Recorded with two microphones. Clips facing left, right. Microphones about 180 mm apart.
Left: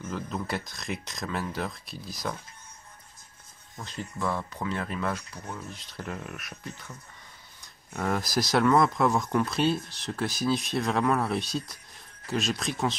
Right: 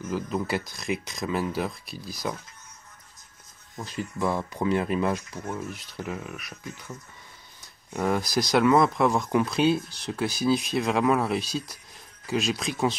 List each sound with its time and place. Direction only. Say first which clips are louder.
0.0 s speech: right 5 dB; 5° right (ahead or behind)
3.7 s speech: right 4 dB; 15° right (ahead or behind)
6.0 s speech: right 2 dB; centre (ahead or behind)
7.9 s speech: right 3 dB; centre (ahead or behind)